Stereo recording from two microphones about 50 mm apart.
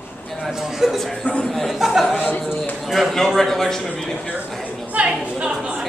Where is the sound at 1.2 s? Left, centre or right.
Left.